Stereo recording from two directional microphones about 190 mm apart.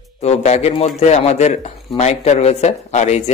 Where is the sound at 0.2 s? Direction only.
35° left (ahead or behind).